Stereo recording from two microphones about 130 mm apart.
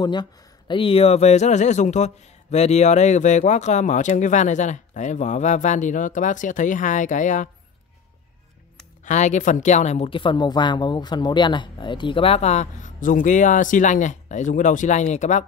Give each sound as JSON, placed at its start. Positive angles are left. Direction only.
{"t": 0.0, "sound": "speech", "side_deg": 35}
{"t": 9.0, "sound": "speech", "side_deg": 70}
{"t": 10.0, "sound": "speech", "side_deg": 40}